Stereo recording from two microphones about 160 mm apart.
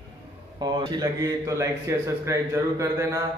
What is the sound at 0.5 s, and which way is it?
A man's voice, 30° right (ahead or behind).